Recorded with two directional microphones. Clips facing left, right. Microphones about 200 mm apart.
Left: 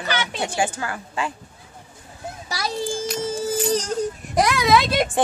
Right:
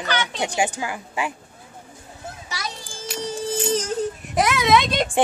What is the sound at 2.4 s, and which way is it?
Children playing, 35° left (ahead or behind).